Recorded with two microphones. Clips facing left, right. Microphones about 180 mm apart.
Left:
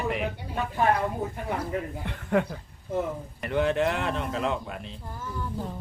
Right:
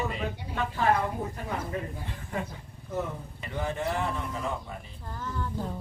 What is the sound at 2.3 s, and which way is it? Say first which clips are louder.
Speech: left 10 dB; 65° left (ahead or behind).